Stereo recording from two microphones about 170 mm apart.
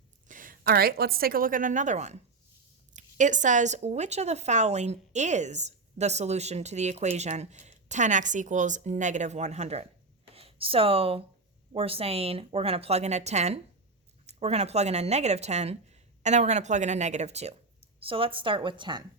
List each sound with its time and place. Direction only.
0.3 s a woman's voice: 55° right (ahead or behind); by 19.0 s 25° right (ahead or behind)